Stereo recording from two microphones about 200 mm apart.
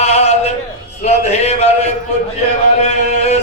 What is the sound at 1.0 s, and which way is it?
Speech, 35° left (ahead or behind).